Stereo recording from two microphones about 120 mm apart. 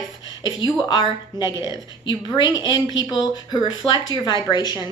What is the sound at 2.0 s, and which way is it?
A woman's voice, 40° left (ahead or behind).